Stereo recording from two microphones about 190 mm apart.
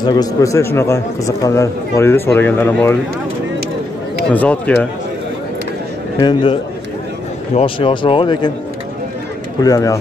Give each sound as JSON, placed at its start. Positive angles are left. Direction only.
{"t": 0.0, "sound": "a man's voice", "side_deg": 20}
{"t": 4.3, "sound": "a man's voice", "side_deg": 5}
{"t": 6.1, "sound": "speech", "side_deg": 25}
{"t": 9.6, "sound": "a man's voice", "side_deg": 20}